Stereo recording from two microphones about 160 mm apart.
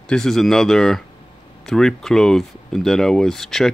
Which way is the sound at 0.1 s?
Centre (ahead or behind).